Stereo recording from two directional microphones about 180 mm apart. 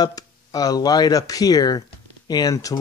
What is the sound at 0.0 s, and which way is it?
Speech, 20° left (ahead or behind).